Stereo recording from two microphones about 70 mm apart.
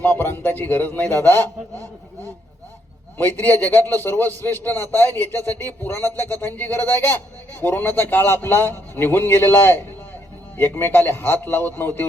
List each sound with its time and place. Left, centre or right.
0.2 s a man's voice: left
3.2 s a man's voice: left
5.4 s speech: right
5.6 s a man's voice: left